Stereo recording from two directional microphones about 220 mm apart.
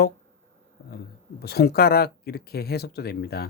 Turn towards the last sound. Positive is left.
turn(degrees=45)  # may be behind; listen again after turning